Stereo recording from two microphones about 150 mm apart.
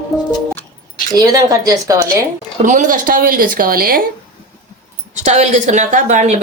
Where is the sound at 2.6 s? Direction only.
60° right (ahead or behind); by 4.0 s 80° right.